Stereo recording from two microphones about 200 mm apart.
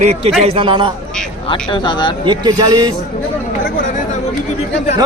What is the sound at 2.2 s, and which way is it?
Speech, 20° right (ahead or behind).